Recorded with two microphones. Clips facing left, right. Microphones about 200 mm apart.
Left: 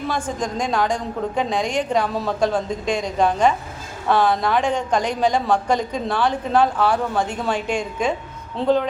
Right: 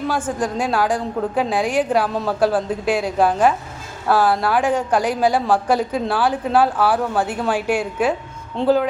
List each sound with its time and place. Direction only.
0.1 s a woman's voice: 5° right (ahead or behind)